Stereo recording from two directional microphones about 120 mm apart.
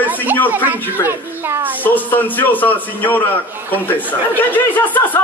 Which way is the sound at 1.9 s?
15° left (ahead or behind).